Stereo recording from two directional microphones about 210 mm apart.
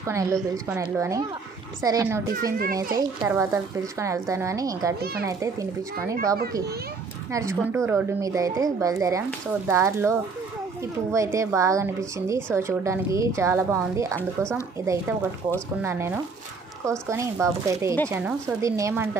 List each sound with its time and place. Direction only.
0.0 s speech: 15° right (ahead or behind)
2.4 s a child's voice: 45° right (ahead or behind)
3.3 s speech: 10° right (ahead or behind)
7.3 s speech: 15° right (ahead or behind)